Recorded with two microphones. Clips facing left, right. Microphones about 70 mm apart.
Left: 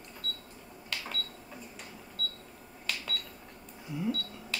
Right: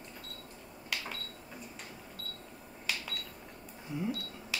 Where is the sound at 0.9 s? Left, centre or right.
Centre.